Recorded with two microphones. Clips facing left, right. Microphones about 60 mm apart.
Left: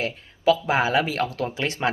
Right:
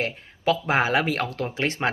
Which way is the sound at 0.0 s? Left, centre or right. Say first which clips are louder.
Left 3 dB; right.